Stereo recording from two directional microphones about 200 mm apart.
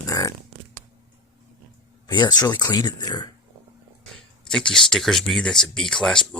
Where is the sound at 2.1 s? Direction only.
20° left (ahead or behind).